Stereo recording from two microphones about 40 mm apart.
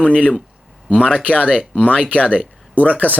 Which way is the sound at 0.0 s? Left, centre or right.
Left.